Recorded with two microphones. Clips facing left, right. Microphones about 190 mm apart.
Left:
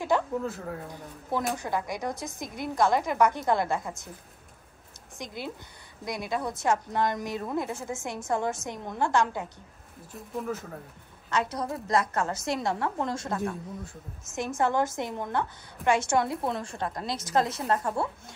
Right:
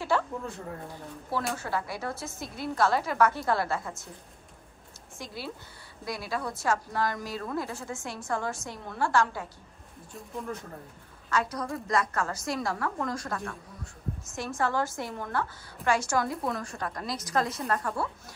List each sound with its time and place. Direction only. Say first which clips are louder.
0.1 s a sound: left 1 dB; 15° left (ahead or behind)
0.5 s speech: left 3 dB; centre (ahead or behind)
1.5 s a woman's voice: left 2 dB; 15° left (ahead or behind)
5.2 s a woman's voice: left 2 dB; 20° left (ahead or behind)
10.1 s speech: left 3 dB; 5° left (ahead or behind)
11.2 s a woman's voice: left 1 dB; 20° left (ahead or behind)